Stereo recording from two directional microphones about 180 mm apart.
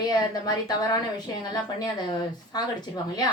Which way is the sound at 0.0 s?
20° left (ahead or behind).